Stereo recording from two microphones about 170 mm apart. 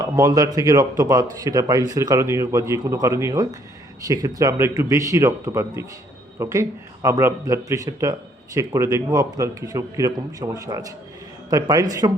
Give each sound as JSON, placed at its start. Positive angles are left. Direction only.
{"t": 0.0, "sound": "a man's voice", "side_deg": -20}